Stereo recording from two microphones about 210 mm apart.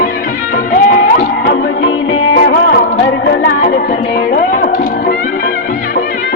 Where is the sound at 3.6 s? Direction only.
35° left (ahead or behind).